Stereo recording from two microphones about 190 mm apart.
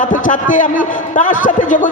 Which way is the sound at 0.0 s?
45° left (ahead or behind).